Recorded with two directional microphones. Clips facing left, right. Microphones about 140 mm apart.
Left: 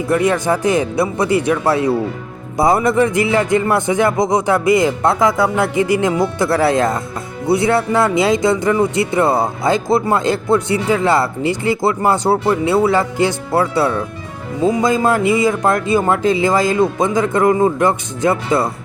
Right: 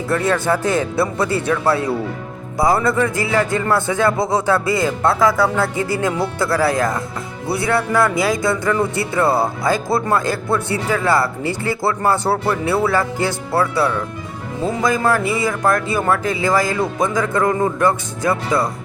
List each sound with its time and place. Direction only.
0.1 s speech: 15° left (ahead or behind)